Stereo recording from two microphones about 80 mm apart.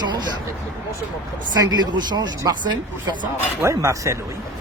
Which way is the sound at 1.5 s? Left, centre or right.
Right.